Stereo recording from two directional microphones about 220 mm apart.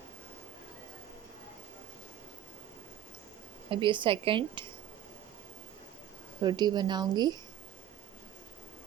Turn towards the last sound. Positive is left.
turn(degrees=-20)  # may be behind; listen again after turning